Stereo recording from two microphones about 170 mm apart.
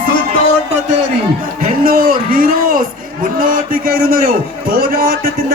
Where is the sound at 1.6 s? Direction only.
55° right (ahead or behind).